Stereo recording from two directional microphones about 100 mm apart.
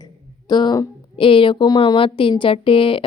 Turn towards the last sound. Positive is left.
turn(degrees=65)  # may be behind; listen again after turning